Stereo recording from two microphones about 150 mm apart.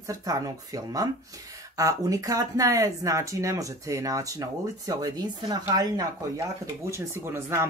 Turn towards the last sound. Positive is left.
turn(degrees=-15)  # may be behind; listen again after turning